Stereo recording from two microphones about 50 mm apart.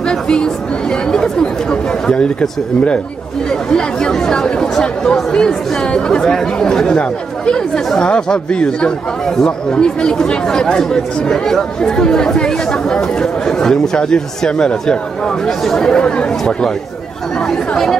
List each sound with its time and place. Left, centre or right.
0.1 s speech: centre
3.7 s speech: centre